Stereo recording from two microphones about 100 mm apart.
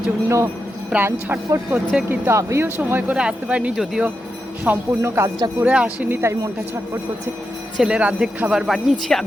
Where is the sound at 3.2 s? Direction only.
10° right (ahead or behind).